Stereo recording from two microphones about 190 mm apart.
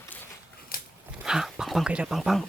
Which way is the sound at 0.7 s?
50° left (ahead or behind).